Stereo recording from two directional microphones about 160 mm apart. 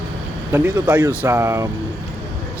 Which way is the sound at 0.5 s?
10° right (ahead or behind).